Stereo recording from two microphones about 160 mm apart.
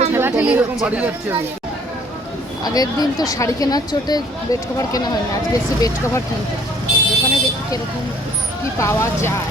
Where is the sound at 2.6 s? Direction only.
25° left (ahead or behind).